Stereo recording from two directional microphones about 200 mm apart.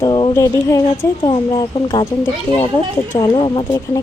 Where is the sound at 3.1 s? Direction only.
20° left (ahead or behind).